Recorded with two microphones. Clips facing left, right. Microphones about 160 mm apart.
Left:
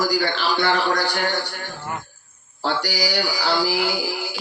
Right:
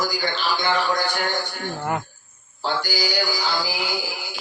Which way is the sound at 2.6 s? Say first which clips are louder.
Left 1 dB; 70° left (ahead or behind).